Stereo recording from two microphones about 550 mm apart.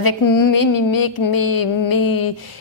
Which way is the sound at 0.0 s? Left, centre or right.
Left.